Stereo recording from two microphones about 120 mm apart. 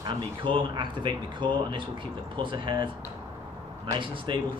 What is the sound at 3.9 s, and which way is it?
Speech, 45° right (ahead or behind).